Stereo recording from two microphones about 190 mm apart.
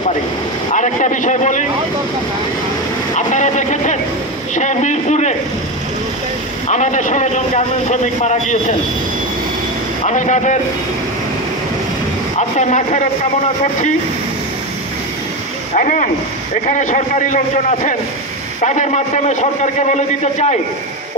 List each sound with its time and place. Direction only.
0.7 s a man's voice: 40° left (ahead or behind)
3.2 s a man's voice: 40° left (ahead or behind)
6.7 s a man's voice: 40° left (ahead or behind)
10.0 s a man's voice: 40° left (ahead or behind)
12.4 s a man's voice: 40° left (ahead or behind)
15.7 s a man's voice: 45° left (ahead or behind)